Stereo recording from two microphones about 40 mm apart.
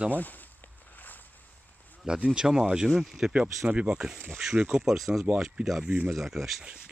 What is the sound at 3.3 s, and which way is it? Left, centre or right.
Speech, right.